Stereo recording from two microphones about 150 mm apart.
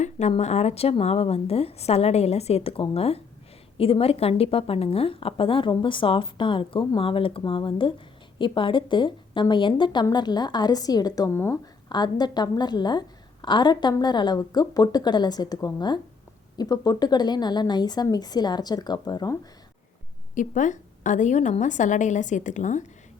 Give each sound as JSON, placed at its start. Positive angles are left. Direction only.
{"t": 0.0, "sound": "a woman's voice", "side_deg": 50}
{"t": 11.9, "sound": "a woman's voice", "side_deg": 30}
{"t": 20.3, "sound": "a woman's voice", "side_deg": 60}